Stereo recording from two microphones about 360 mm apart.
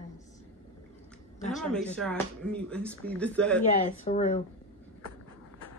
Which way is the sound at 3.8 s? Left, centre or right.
Centre.